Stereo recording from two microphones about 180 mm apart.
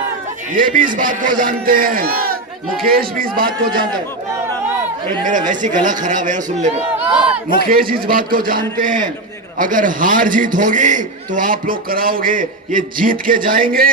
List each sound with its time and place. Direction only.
0.5 s a man's voice: 50° right (ahead or behind)
3.7 s a man's voice: 25° right (ahead or behind)
5.5 s a man's voice: 45° right (ahead or behind)
7.7 s a man's voice: 55° right (ahead or behind)